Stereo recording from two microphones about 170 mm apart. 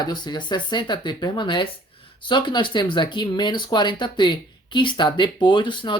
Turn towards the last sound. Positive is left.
turn(degrees=25)  # may be behind; listen again after turning